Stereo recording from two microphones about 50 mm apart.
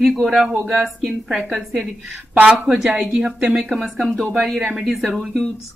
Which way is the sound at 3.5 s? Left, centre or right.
Centre.